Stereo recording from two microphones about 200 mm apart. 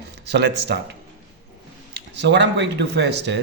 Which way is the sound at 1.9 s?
60° right (ahead or behind).